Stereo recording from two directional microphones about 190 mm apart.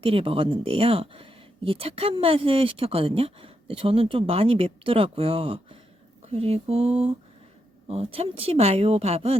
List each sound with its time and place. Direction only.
0.0 s speech: 30° right (ahead or behind)